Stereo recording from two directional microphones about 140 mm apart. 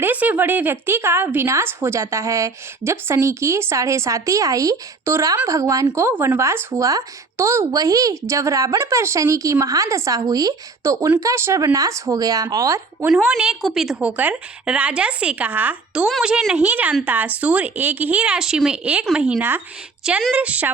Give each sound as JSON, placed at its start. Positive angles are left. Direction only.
{"t": 0.0, "sound": "speech", "side_deg": -10}
{"t": 13.1, "sound": "speech", "side_deg": -5}